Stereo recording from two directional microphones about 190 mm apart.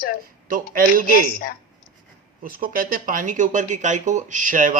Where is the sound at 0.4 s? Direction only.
50° right (ahead or behind).